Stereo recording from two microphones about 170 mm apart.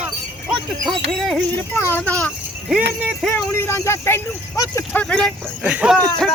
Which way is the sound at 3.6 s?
15° left (ahead or behind).